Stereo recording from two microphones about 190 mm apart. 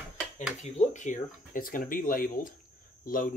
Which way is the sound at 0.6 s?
40° left (ahead or behind).